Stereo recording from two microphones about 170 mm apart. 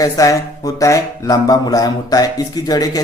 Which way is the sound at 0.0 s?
20° left (ahead or behind).